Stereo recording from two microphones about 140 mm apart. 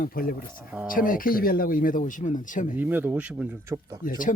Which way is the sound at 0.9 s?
75° left (ahead or behind).